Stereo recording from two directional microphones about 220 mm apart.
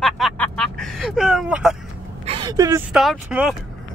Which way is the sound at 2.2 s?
20° right (ahead or behind).